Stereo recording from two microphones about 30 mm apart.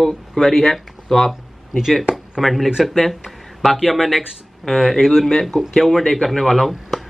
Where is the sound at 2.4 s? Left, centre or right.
Centre.